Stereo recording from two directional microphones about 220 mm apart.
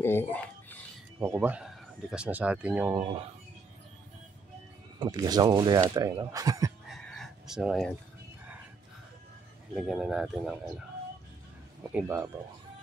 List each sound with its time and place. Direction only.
0.0 s a sound: 10° left (ahead or behind)
1.2 s speech: 10° right (ahead or behind)
4.9 s speech: 20° right (ahead or behind)
6.9 s a sound: centre (ahead or behind)
9.8 s speech: centre (ahead or behind)
11.9 s speech: 10° right (ahead or behind)